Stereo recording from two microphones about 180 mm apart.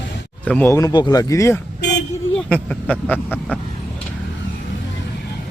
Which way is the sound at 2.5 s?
5° left (ahead or behind).